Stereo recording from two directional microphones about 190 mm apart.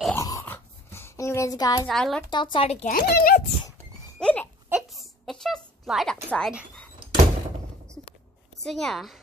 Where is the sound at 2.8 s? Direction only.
55° left (ahead or behind).